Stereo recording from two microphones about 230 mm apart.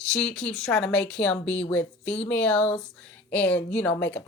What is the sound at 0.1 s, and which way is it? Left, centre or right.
Speech, centre.